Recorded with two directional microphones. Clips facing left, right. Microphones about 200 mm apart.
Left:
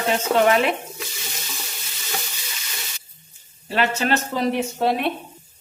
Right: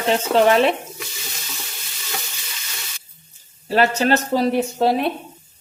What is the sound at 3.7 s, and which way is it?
Frying, 35° right (ahead or behind).